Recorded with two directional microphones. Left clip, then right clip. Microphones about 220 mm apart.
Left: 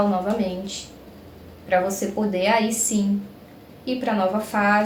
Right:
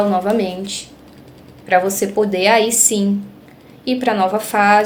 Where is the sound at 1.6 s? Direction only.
40° right (ahead or behind).